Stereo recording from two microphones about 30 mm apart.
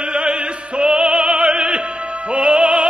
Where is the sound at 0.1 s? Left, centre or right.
Right.